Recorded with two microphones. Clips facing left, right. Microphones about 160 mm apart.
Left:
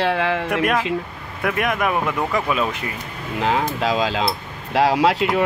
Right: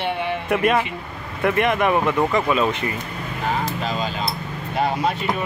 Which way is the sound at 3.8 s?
90° left.